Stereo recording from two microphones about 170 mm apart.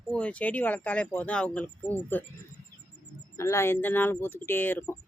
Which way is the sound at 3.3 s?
15° left (ahead or behind).